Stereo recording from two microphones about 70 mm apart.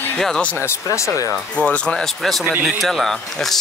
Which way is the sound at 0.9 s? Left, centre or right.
Left.